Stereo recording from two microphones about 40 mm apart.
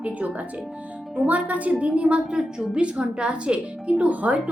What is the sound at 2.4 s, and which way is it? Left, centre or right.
Speech, centre.